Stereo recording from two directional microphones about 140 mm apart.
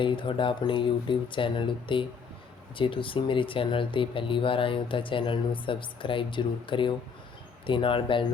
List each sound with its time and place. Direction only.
0.0 s speech: 35° left (ahead or behind)